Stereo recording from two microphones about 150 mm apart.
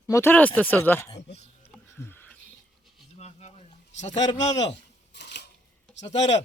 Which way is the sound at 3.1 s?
45° left (ahead or behind).